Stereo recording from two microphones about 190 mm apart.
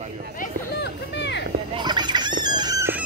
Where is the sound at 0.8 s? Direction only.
65° left (ahead or behind).